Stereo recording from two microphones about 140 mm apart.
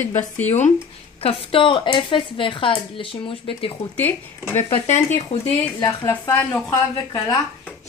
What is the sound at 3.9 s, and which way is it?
Speech, 15° left (ahead or behind).